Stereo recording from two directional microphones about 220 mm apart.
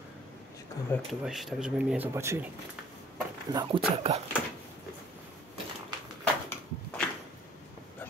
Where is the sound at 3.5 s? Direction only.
25° right (ahead or behind).